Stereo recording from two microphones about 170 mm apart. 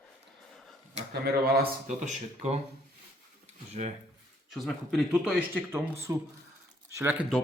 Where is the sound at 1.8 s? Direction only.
45° right (ahead or behind).